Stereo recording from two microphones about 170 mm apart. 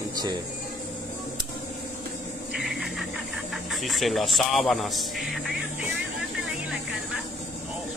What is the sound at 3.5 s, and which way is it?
Speech, centre (ahead or behind).